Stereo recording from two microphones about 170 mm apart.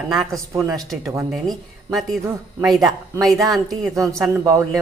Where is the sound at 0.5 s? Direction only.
15° right (ahead or behind).